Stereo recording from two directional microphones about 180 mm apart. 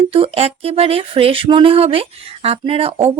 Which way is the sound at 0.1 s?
30° right (ahead or behind).